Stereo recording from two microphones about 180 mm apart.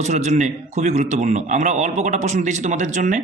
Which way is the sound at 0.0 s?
40° right (ahead or behind).